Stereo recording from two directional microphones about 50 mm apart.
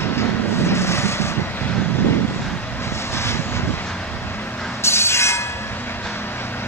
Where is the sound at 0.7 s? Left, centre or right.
Left.